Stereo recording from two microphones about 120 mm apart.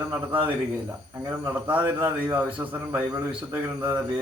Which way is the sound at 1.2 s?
15° right (ahead or behind).